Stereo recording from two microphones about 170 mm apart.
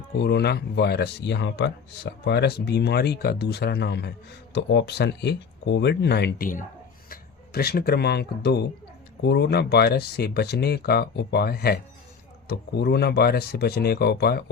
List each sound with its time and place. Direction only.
0.2 s speech: 75° left (ahead or behind)